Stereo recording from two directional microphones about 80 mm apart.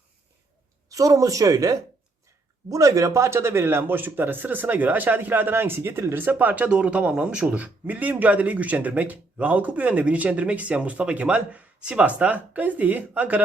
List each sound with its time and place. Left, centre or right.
0.9 s a man's voice: right